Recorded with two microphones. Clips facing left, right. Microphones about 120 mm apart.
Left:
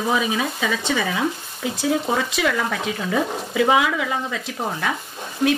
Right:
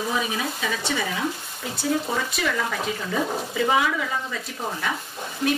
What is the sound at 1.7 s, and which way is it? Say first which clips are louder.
Speech: left 3 dB; 80° left.